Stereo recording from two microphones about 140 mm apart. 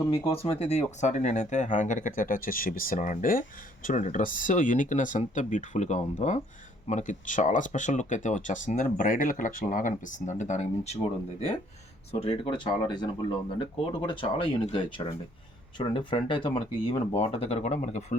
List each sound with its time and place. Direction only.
0.1 s speech: 45° left (ahead or behind); by 3.4 s 75° left (ahead or behind)
3.8 s speech: 65° left (ahead or behind)
12.2 s speech: 40° left (ahead or behind)
17.2 s speech: 45° left (ahead or behind)